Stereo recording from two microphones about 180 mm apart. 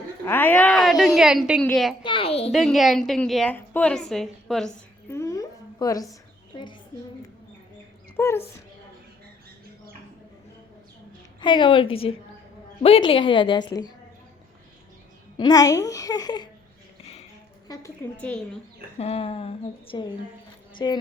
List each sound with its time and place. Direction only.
0.3 s a woman's voice: 10° left (ahead or behind)
2.0 s a woman's voice: 30° left (ahead or behind)
2.5 s a woman's voice: centre (ahead or behind)
5.1 s a sound: 15° left (ahead or behind)
8.1 s speech: 15° left (ahead or behind)
11.3 s a woman's voice: 25° left (ahead or behind)
15.4 s a woman's voice: 20° left (ahead or behind)
17.7 s a woman's voice: 20° left (ahead or behind)
18.9 s a woman's voice: 35° left (ahead or behind)